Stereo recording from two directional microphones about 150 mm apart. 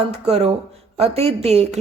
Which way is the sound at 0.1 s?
45° right (ahead or behind).